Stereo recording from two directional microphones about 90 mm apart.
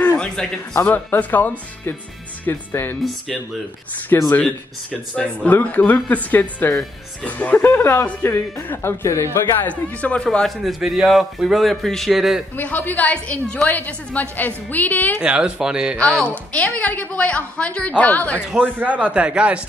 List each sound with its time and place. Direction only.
0.4 s a woman's voice: 10° left (ahead or behind)
0.7 s speech: 20° left (ahead or behind)
4.1 s speech: 25° left (ahead or behind)
5.1 s a woman's voice: 15° left (ahead or behind)
6.7 s speech: 5° left (ahead or behind)
7.2 s speech: 15° left (ahead or behind)
9.7 s a woman's voice: 15° left (ahead or behind)
10.6 s speech: centre (ahead or behind)
12.5 s a woman's voice: 20° left (ahead or behind)
15.1 s a man's voice: 10° right (ahead or behind)
16.0 s a woman's voice: 10° left (ahead or behind)
18.6 s a man's voice: 20° right (ahead or behind)